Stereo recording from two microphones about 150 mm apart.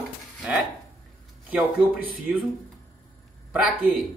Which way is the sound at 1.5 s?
5° right (ahead or behind).